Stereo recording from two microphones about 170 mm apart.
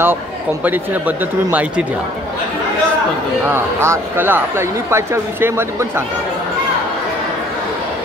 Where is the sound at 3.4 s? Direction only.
15° right (ahead or behind).